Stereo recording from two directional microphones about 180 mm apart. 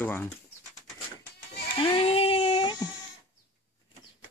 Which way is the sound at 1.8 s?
30° left (ahead or behind).